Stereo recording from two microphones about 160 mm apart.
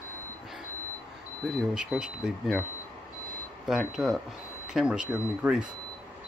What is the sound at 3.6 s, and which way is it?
Speech, 5° right (ahead or behind).